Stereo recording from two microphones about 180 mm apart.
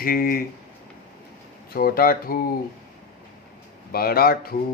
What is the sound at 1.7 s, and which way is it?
Speech, 55° left (ahead or behind).